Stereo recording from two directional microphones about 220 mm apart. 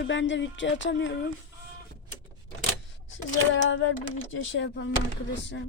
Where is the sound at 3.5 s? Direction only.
65° left (ahead or behind).